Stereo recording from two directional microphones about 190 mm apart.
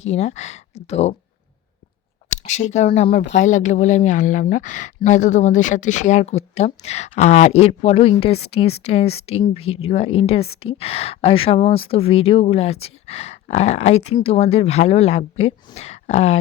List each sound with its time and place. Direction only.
0.0 s speech: 35° left (ahead or behind)
2.3 s speech: 40° left (ahead or behind)